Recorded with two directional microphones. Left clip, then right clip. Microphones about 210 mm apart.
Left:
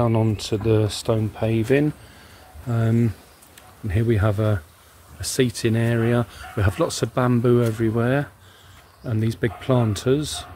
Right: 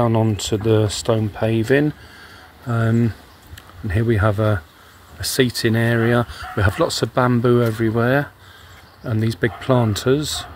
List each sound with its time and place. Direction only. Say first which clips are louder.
0.0 s speech: right 3 dB; 5° right (ahead or behind)